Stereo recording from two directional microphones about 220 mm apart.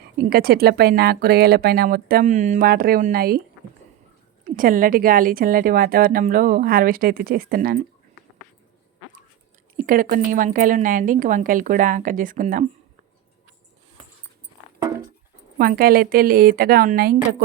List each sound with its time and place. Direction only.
0.0 s speech: 45° right (ahead or behind)
4.4 s speech: 40° right (ahead or behind)
9.7 s speech: 40° right (ahead or behind)
14.8 s dog: 15° right (ahead or behind)
15.5 s speech: 40° right (ahead or behind)